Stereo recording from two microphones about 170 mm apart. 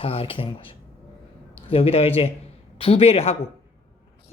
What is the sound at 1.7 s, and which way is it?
Speech, 35° left (ahead or behind).